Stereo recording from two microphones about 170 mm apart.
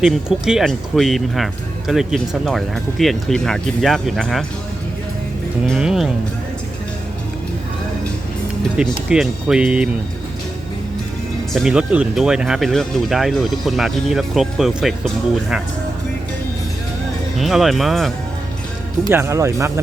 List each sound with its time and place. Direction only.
0.0 s speech: 5° right (ahead or behind)
5.6 s speech: 5° right (ahead or behind)
8.7 s speech: 5° right (ahead or behind)
11.5 s speech: 5° right (ahead or behind)
17.3 s speech: centre (ahead or behind)
19.1 s speech: 15° right (ahead or behind)